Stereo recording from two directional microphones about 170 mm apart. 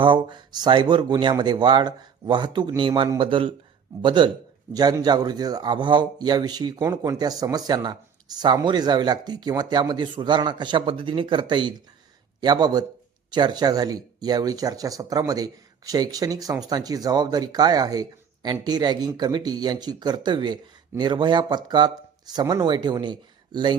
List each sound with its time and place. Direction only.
0.0 s a man's voice: 25° right (ahead or behind)